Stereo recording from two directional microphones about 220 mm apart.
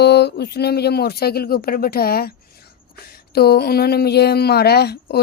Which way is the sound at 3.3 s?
45° left (ahead or behind).